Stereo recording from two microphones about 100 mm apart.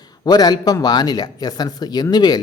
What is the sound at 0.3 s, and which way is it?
Speech, 40° left (ahead or behind).